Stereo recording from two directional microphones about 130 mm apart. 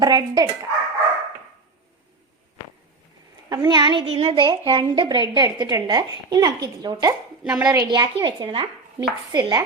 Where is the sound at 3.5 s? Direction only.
30° right (ahead or behind).